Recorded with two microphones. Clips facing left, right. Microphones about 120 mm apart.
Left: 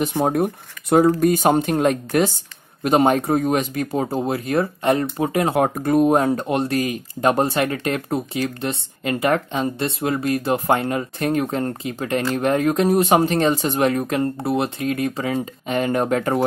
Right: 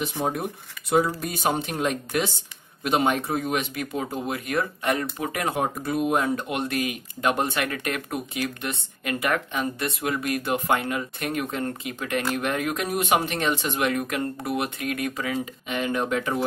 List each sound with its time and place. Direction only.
0.1 s speech: 55° left (ahead or behind); by 5.5 s 30° left (ahead or behind)
5.8 s speech: 45° left (ahead or behind)
15.6 s speech: 40° left (ahead or behind)